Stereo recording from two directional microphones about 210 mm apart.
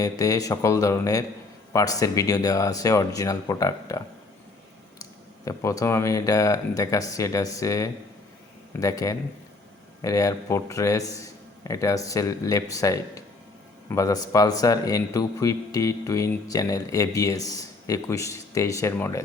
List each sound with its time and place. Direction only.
0.0 s speech: 15° left (ahead or behind)
5.5 s speech: 15° left (ahead or behind)